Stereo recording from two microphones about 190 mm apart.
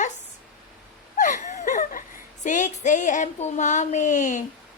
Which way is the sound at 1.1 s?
40° left (ahead or behind).